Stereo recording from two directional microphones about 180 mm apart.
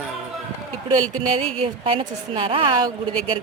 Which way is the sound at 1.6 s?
30° right (ahead or behind).